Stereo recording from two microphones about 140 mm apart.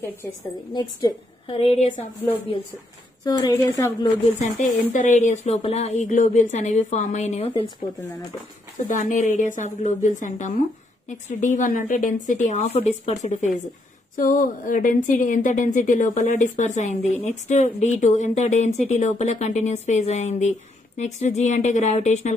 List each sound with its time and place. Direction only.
1.5 s a woman's voice: 45° left (ahead or behind)
3.3 s speech: 25° left (ahead or behind)
4.4 s speech: 60° left (ahead or behind)
8.8 s speech: 65° left (ahead or behind)
14.1 s speech: 70° left (ahead or behind); by 22.3 s 55° left (ahead or behind)